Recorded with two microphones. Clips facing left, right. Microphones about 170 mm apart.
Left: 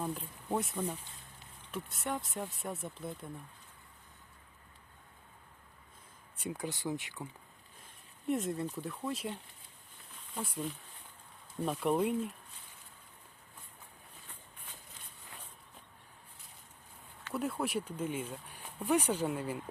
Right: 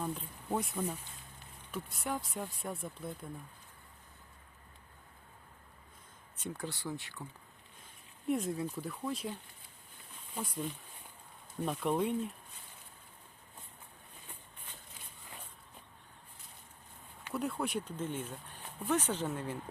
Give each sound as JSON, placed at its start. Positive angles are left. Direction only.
{"t": 0.0, "sound": "speech", "side_deg": 0}
{"t": 6.4, "sound": "speech", "side_deg": 15}
{"t": 8.3, "sound": "speech", "side_deg": 0}
{"t": 10.5, "sound": "speech", "side_deg": 0}
{"t": 17.3, "sound": "speech", "side_deg": 0}